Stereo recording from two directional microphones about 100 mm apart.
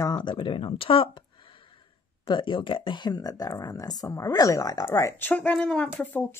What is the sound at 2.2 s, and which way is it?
Speech, 55° left (ahead or behind).